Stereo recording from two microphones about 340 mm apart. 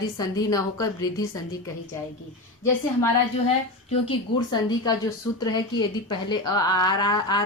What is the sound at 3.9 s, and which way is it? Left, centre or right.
A woman's voice, centre.